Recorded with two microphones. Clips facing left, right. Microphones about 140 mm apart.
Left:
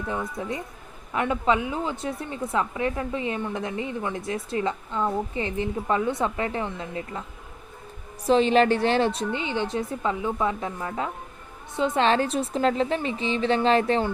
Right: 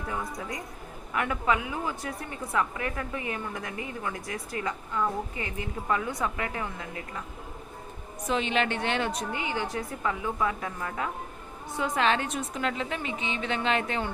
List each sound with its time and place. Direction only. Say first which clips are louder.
0.1 s a woman's voice: left 4 dB; 25° left (ahead or behind)
8.3 s a woman's voice: left 9 dB; 35° left (ahead or behind)